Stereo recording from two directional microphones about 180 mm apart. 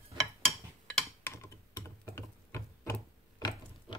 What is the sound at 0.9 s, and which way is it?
Typing, 10° left (ahead or behind).